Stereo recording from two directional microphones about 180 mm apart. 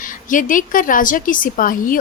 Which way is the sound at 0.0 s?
45° left (ahead or behind).